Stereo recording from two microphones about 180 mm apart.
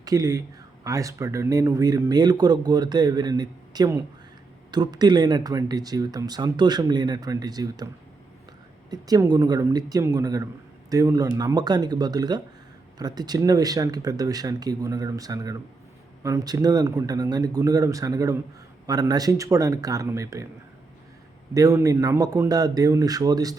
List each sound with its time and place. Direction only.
0.0 s speech: 20° right (ahead or behind)
8.9 s speech: 20° right (ahead or behind)
21.5 s speech: 20° right (ahead or behind)